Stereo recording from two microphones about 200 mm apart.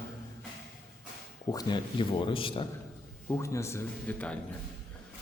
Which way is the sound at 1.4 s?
20° left (ahead or behind).